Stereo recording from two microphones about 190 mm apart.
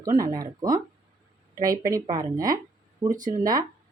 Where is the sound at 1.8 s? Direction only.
15° right (ahead or behind).